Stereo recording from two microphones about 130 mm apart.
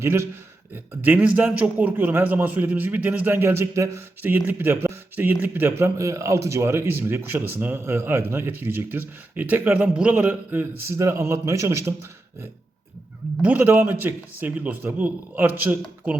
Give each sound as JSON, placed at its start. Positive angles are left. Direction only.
{"t": 0.0, "sound": "a man's voice", "side_deg": -20}
{"t": 13.4, "sound": "a man's voice", "side_deg": -15}